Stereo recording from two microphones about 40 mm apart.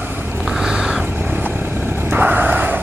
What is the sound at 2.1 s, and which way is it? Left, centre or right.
Vehicle, right.